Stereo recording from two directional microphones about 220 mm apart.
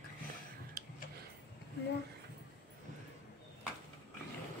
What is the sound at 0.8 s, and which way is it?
Tick-tock, 40° right (ahead or behind).